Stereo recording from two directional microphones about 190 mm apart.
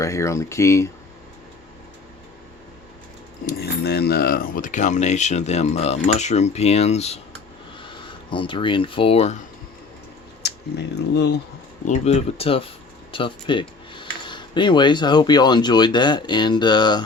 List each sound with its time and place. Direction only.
0.0 s speech: 15° left (ahead or behind)
3.4 s speech: 55° left (ahead or behind); by 9.4 s 35° left (ahead or behind)
10.4 s speech: 60° left (ahead or behind)
11.9 s speech: 35° left (ahead or behind)